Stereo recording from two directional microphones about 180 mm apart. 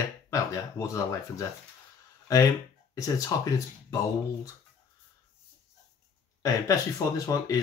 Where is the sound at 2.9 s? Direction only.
20° left (ahead or behind).